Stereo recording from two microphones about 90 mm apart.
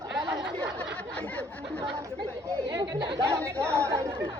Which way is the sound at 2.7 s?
55° right (ahead or behind).